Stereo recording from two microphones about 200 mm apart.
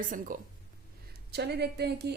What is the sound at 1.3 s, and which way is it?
Speech, 55° right (ahead or behind).